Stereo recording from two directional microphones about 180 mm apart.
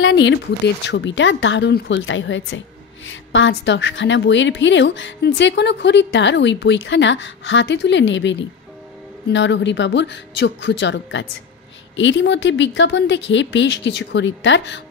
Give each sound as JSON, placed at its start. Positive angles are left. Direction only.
{"t": 0.0, "sound": "a woman's voice", "side_deg": 75}